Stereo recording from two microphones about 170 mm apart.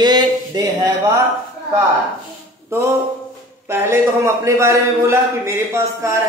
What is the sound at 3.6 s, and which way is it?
Speech, 15° right (ahead or behind).